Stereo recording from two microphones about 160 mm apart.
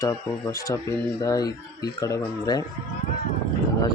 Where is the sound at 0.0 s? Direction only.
20° left (ahead or behind).